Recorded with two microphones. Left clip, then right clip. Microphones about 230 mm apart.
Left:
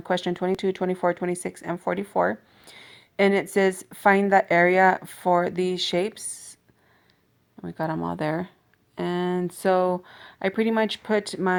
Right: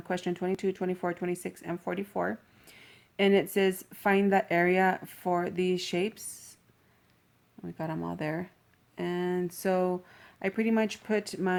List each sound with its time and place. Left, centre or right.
0.3 s speech: left
7.6 s speech: left